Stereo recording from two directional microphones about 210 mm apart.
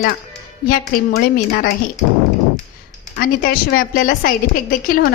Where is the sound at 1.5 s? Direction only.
45° left (ahead or behind).